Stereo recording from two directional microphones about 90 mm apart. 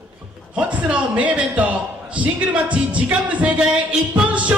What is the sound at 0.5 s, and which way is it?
A man's voice, 15° right (ahead or behind).